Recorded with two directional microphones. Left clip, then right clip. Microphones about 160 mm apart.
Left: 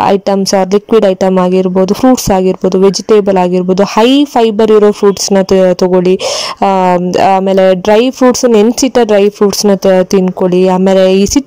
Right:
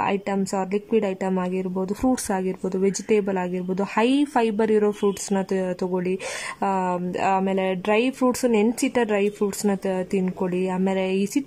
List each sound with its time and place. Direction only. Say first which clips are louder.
0.0 s speech: left 15 dB; 40° left (ahead or behind)